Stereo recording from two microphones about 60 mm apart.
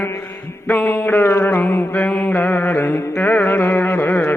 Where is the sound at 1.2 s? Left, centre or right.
Left.